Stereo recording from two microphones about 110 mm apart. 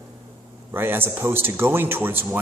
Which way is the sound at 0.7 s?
20° right (ahead or behind).